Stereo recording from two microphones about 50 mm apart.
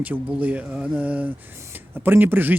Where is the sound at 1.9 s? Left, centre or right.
Right.